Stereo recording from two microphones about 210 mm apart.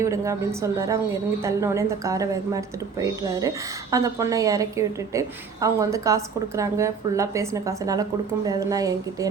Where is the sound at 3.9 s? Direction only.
15° right (ahead or behind).